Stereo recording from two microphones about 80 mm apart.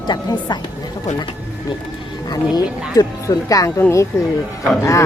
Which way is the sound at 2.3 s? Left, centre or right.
Left.